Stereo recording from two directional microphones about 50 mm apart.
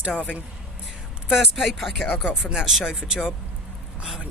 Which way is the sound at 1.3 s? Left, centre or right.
Centre.